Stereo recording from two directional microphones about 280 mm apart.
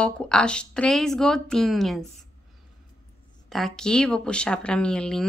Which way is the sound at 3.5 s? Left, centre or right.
Centre.